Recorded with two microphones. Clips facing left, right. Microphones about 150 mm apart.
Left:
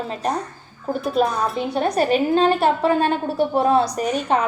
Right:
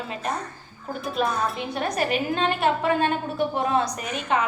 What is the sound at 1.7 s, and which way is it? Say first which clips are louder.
A woman's voice: left 7 dB; 30° left (ahead or behind).